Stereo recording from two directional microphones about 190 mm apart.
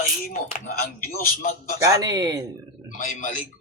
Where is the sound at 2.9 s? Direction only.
45° left (ahead or behind).